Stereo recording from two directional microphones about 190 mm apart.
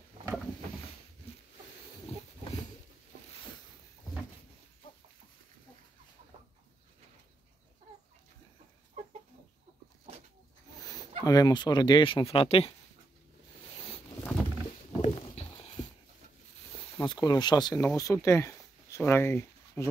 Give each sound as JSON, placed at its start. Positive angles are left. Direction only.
{"t": 11.2, "sound": "speech", "side_deg": 20}
{"t": 15.0, "sound": "a sound", "side_deg": 35}
{"t": 17.0, "sound": "speech", "side_deg": 25}